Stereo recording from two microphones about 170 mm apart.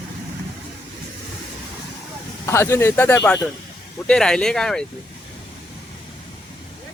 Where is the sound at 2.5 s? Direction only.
15° left (ahead or behind).